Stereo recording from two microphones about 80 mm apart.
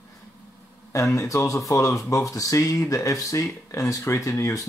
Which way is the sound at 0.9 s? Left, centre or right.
Left.